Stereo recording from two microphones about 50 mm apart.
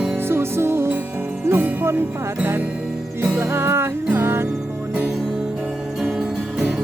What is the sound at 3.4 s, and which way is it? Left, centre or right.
Music, right.